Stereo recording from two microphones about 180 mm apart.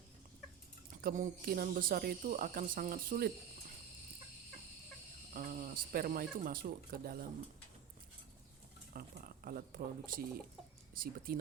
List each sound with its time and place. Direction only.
1.0 s speech: 50° right (ahead or behind)
5.3 s speech: 50° right (ahead or behind)
8.9 s speech: 55° right (ahead or behind)